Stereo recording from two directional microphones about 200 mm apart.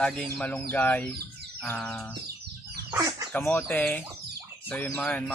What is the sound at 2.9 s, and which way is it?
Speech, 15° right (ahead or behind).